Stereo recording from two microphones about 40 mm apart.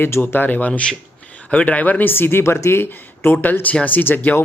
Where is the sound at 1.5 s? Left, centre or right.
Left.